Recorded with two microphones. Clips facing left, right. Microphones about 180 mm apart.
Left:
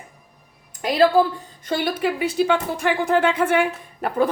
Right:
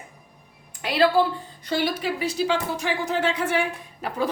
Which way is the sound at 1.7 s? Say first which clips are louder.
Left 3 dB; 55° left (ahead or behind).